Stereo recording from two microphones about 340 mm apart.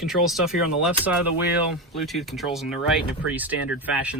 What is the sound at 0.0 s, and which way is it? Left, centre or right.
Speech, centre.